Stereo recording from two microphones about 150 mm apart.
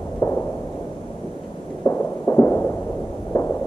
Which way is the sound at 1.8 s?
15° left (ahead or behind).